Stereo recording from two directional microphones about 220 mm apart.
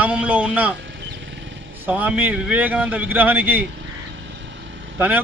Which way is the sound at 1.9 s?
5° right (ahead or behind).